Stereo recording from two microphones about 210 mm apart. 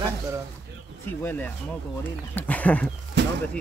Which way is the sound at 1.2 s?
10° left (ahead or behind).